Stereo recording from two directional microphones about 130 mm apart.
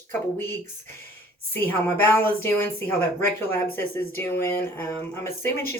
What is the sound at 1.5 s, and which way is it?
A woman's voice, 15° left (ahead or behind).